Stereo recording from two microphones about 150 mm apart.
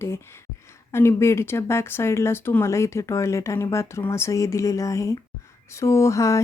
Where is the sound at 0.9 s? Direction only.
15° left (ahead or behind).